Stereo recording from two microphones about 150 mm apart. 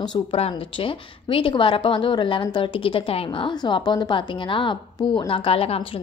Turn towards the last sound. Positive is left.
turn(degrees=40)  # may be behind; listen again after turning